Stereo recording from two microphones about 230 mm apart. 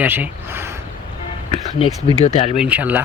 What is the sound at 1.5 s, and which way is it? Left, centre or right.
Speech, left.